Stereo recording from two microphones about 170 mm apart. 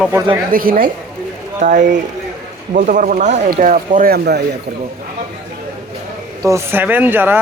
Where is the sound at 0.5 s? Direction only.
55° right (ahead or behind).